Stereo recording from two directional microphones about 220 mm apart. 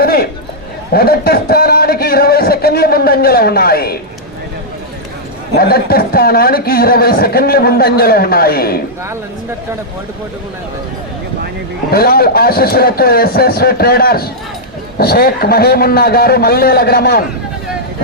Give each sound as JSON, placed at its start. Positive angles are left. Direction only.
{"t": 0.0, "sound": "a sound", "side_deg": 45}
{"t": 0.9, "sound": "a man's voice", "side_deg": 45}
{"t": 5.5, "sound": "speech", "side_deg": 45}
{"t": 11.9, "sound": "speech", "side_deg": 45}